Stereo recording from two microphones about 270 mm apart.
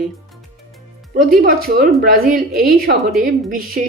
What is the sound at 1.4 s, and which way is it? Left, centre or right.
Speech, right.